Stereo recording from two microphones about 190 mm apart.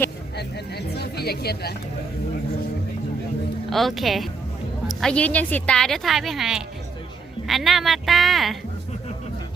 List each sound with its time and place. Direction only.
0.3 s speech: 60° left (ahead or behind)
3.7 s a woman's voice: centre (ahead or behind)